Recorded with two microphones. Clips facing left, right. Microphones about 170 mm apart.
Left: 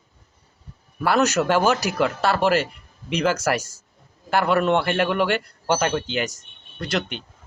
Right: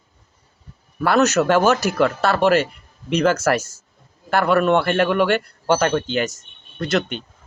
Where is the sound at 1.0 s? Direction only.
10° left (ahead or behind).